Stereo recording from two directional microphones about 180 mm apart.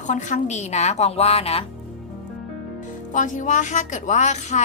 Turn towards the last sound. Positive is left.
turn(degrees=40)  # may be behind; listen again after turning